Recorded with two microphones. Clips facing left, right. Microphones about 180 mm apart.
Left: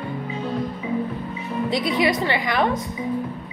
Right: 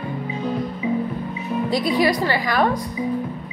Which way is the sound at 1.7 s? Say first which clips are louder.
Right 2 dB; 20° left (ahead or behind).